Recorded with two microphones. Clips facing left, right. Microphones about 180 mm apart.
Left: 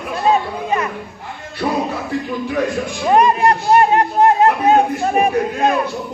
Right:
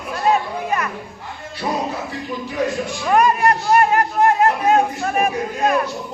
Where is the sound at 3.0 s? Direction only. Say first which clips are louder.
Left 3 dB; 25° left (ahead or behind).